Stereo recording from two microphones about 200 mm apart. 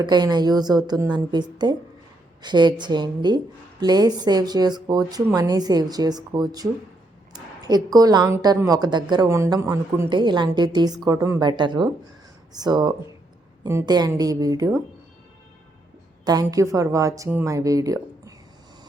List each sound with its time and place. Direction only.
0.0 s a woman's voice: 20° right (ahead or behind)
16.2 s a woman's voice: 20° right (ahead or behind)